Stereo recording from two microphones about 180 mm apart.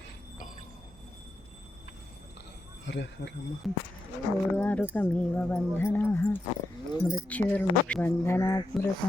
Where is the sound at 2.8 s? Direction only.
80° left.